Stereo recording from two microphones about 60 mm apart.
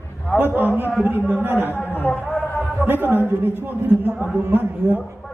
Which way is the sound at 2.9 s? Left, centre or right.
Right.